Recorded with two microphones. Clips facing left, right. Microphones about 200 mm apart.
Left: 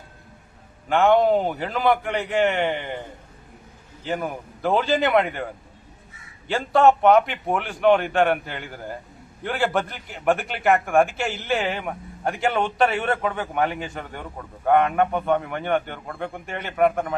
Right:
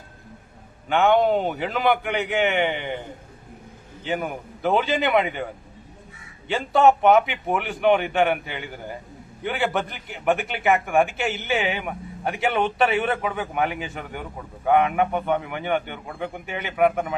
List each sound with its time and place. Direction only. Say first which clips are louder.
0.9 s a man's voice: left 1 dB; centre (ahead or behind)
4.0 s a man's voice: even; centre (ahead or behind)
6.5 s a man's voice: even; centre (ahead or behind)